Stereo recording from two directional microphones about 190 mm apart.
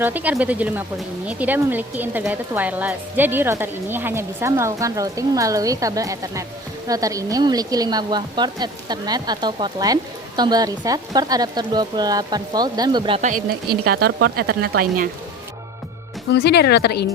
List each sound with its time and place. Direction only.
0.0 s speech: 10° right (ahead or behind); by 13.2 s 25° right (ahead or behind)
13.8 s speech: 55° right (ahead or behind)
16.3 s a woman's voice: 60° left (ahead or behind)